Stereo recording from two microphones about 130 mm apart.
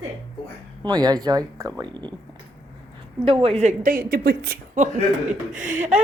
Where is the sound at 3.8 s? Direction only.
90° right.